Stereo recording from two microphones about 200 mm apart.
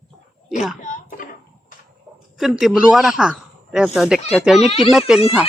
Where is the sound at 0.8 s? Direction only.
40° left (ahead or behind).